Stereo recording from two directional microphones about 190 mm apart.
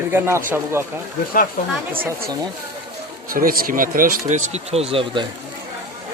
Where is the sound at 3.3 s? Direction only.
50° right (ahead or behind); by 5.2 s 30° right (ahead or behind).